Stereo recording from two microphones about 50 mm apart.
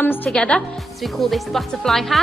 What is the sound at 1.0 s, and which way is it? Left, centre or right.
Speech, centre.